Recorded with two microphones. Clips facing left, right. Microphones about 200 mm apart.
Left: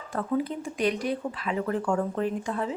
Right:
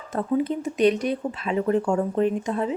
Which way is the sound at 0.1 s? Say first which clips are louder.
Right 4 dB; 20° right (ahead or behind).